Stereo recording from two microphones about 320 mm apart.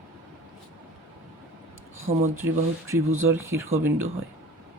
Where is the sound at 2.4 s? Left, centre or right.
Centre.